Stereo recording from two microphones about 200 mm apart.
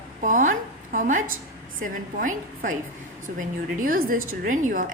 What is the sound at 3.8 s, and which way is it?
A woman's voice, 45° right (ahead or behind).